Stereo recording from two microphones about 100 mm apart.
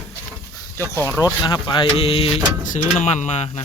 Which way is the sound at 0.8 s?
30° right (ahead or behind).